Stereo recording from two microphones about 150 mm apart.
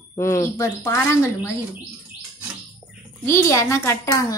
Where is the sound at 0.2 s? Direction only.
20° left (ahead or behind).